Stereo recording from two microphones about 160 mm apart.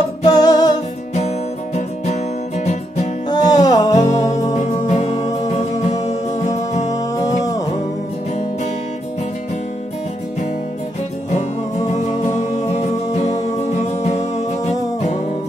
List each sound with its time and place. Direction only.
0.2 s music: 25° left (ahead or behind)
2.6 s music: 45° left (ahead or behind)
3.3 s music: 25° left (ahead or behind)
6.9 s music: 20° left (ahead or behind)
13.9 s music: 45° left (ahead or behind)